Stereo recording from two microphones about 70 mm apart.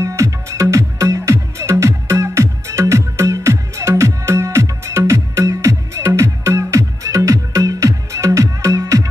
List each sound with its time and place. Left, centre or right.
0.0 s music: right